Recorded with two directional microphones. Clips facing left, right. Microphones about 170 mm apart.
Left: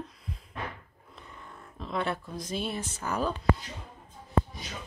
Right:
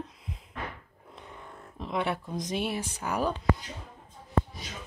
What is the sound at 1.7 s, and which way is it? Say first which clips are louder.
Speech: right 1 dB; 15° right (ahead or behind).